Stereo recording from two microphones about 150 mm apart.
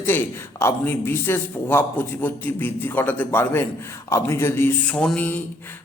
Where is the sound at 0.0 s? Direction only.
15° left (ahead or behind).